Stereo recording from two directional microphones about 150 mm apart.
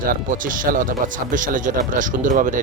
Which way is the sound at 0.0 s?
65° right (ahead or behind).